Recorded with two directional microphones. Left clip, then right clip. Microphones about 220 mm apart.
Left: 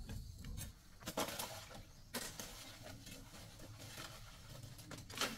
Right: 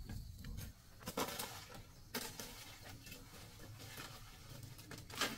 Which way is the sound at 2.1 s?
5° right (ahead or behind).